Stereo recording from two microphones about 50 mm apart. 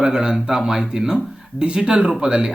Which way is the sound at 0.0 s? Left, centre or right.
Centre.